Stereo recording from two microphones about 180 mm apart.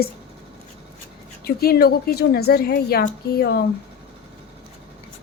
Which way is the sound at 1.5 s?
60° left (ahead or behind).